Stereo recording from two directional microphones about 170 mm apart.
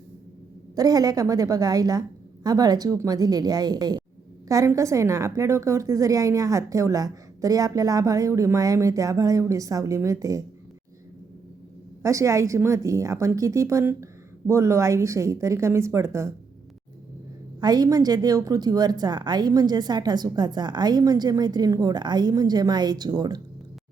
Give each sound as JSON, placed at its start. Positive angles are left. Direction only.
{"t": 0.8, "sound": "a woman's voice", "side_deg": -20}
{"t": 12.0, "sound": "a woman's voice", "side_deg": -20}
{"t": 17.6, "sound": "a woman's voice", "side_deg": -25}